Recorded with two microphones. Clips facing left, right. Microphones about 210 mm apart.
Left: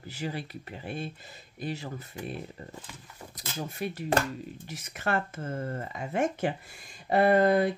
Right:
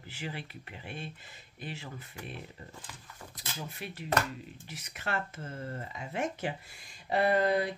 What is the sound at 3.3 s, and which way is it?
Speech, 45° left (ahead or behind).